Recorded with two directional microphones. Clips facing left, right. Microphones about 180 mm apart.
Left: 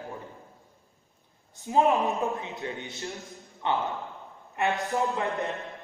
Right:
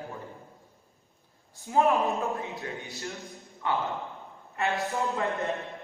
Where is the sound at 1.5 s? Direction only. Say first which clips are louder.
Left 1 dB; 20° left (ahead or behind).